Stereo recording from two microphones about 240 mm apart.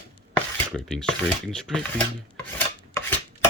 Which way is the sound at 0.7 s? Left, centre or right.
Centre.